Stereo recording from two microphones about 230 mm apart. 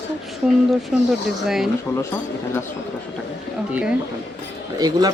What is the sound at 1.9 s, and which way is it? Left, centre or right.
Speech, centre.